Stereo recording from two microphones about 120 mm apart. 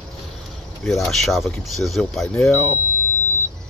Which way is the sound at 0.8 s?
Centre (ahead or behind).